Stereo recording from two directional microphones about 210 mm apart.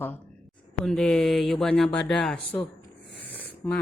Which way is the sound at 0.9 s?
5° left (ahead or behind).